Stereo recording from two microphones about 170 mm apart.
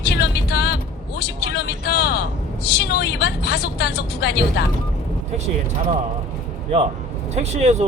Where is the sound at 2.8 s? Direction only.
75° left (ahead or behind).